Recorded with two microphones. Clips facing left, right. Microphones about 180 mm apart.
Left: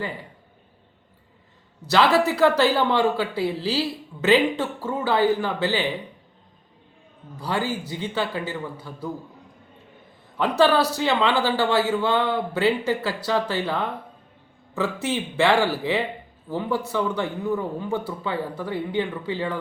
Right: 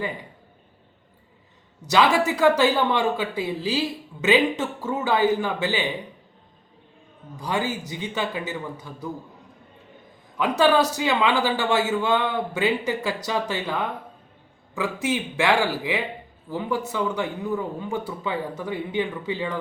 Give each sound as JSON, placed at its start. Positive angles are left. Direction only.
{"t": 1.9, "sound": "a woman's voice", "side_deg": -15}
{"t": 7.3, "sound": "a woman's voice", "side_deg": -15}
{"t": 10.6, "sound": "a woman's voice", "side_deg": -15}